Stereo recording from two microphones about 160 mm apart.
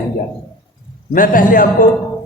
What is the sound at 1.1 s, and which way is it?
Speech, 60° left (ahead or behind).